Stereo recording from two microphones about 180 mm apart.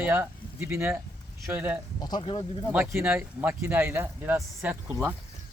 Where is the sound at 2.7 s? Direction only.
10° right (ahead or behind).